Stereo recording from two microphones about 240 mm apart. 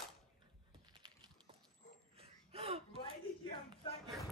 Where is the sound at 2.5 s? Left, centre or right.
Right.